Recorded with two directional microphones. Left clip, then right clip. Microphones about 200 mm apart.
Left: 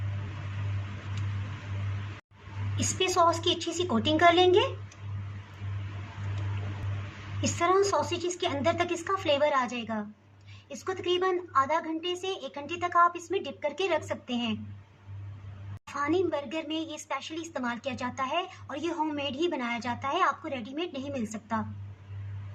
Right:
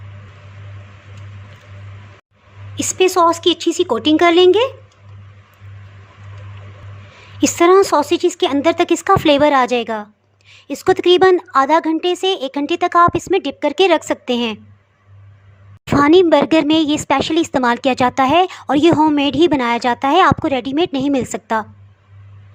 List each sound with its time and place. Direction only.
2.7 s speech: 50° right (ahead or behind)
7.6 s speech: 55° right (ahead or behind)
16.0 s speech: 50° right (ahead or behind)